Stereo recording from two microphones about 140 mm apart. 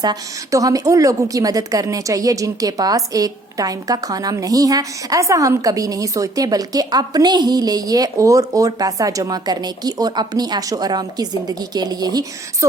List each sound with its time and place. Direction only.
0.0 s a woman's voice: 25° right (ahead or behind)